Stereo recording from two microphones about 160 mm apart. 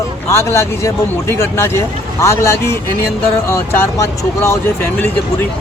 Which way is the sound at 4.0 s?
15° left (ahead or behind).